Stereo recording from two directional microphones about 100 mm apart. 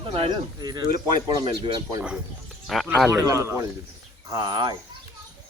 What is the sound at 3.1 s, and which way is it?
Speech, 30° right (ahead or behind).